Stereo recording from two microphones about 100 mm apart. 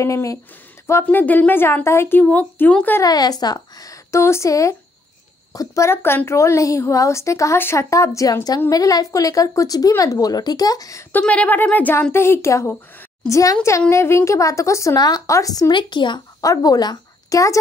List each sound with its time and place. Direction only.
0.0 s a woman's voice: 30° left (ahead or behind)
1.0 s speech: 15° left (ahead or behind)
3.0 s a woman's voice: 40° left (ahead or behind)
11.1 s a woman's voice: 15° left (ahead or behind); by 15.7 s 35° left (ahead or behind)
15.7 s speech: 50° left (ahead or behind)
16.3 s speech: 35° left (ahead or behind)